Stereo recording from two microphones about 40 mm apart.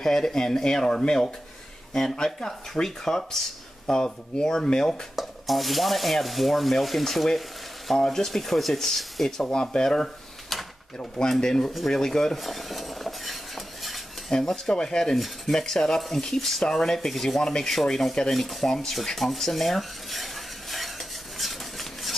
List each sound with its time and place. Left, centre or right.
0.0 s speech: centre
5.1 s stir: centre
9.4 s speech: centre
11.1 s speech: centre
12.4 s stir: centre
14.5 s speech: centre
15.1 s stir: centre
15.5 s speech: centre
17.4 s speech: centre
18.3 s stir: centre
21.4 s a sound: centre